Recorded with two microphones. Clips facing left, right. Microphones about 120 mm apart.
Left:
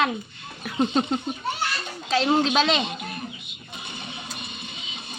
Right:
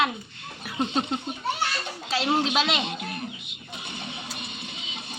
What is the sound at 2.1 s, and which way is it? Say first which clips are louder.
Speech: left 4 dB; 5° right (ahead or behind).